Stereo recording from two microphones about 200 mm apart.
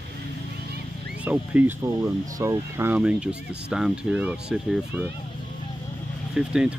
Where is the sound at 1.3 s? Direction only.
10° right (ahead or behind).